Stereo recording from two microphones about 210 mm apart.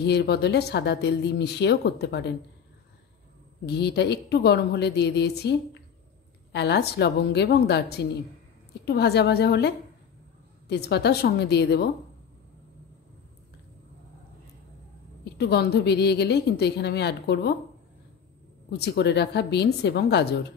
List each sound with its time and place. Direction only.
0.0 s speech: 50° left (ahead or behind)
3.6 s speech: 50° left (ahead or behind)
15.3 s speech: 50° left (ahead or behind)
18.7 s speech: 50° left (ahead or behind)